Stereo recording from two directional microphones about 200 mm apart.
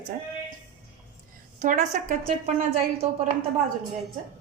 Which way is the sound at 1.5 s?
35° right (ahead or behind).